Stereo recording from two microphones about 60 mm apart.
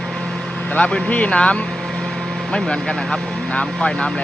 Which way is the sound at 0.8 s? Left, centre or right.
Centre.